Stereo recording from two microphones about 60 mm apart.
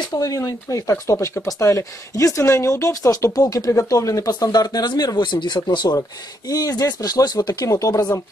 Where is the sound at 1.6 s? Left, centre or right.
Left.